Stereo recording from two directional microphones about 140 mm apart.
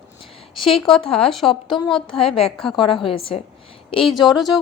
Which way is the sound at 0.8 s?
5° left (ahead or behind).